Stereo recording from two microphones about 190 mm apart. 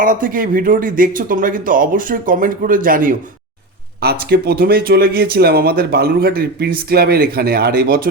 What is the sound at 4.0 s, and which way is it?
Speech, 60° right (ahead or behind).